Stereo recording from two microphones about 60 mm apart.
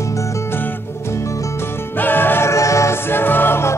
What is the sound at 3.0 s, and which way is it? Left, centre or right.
Music, left.